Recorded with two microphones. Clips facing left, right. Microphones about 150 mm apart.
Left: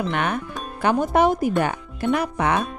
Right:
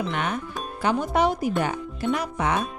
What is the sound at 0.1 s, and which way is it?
Speech, 60° left (ahead or behind).